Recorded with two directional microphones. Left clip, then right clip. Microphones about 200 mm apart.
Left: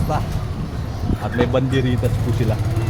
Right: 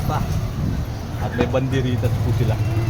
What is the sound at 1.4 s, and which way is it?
Speech, 30° left (ahead or behind).